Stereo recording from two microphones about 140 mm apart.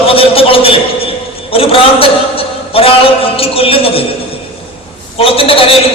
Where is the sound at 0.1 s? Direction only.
40° left (ahead or behind).